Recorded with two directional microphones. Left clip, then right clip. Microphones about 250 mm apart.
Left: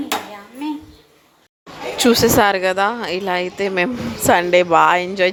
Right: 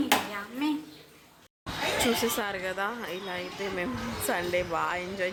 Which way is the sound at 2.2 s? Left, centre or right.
Left.